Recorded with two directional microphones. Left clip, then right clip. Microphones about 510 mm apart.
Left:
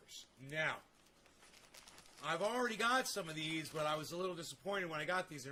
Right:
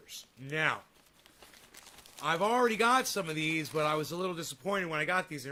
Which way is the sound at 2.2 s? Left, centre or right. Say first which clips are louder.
Right 10 dB; right.